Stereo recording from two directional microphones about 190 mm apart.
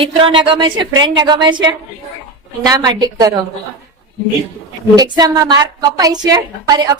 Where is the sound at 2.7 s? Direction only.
20° right (ahead or behind).